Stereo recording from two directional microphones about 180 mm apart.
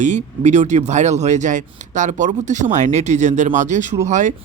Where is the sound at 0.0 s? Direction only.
40° right (ahead or behind).